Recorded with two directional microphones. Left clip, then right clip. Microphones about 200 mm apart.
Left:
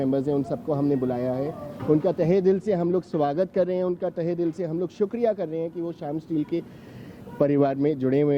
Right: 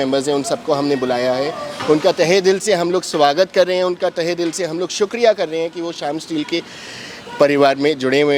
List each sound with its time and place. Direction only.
0.0 s speech: 10° right (ahead or behind)